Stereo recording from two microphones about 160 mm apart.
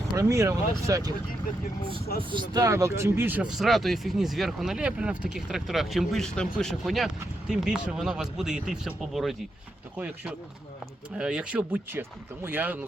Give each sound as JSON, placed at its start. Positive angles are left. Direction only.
{"t": 0.2, "sound": "speech", "side_deg": -20}
{"t": 2.3, "sound": "speech", "side_deg": -25}